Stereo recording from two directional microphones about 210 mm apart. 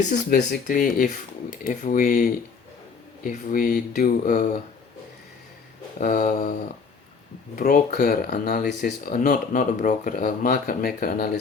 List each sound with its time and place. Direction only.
0.3 s speech: 50° left (ahead or behind)
6.0 s speech: 40° left (ahead or behind)
7.5 s speech: 40° left (ahead or behind)